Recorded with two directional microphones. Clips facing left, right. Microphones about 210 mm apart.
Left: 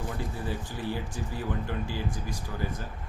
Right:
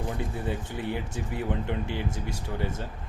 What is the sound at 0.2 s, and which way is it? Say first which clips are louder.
Speech: right 2 dB; 25° right (ahead or behind).